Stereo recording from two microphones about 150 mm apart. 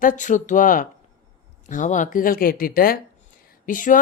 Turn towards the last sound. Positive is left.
turn(degrees=60)  # may be behind; listen again after turning